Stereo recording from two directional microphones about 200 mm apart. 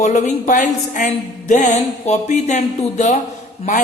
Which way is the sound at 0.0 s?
35° left (ahead or behind).